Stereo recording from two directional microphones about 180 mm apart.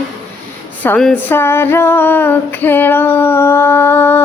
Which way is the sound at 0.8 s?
5° left (ahead or behind).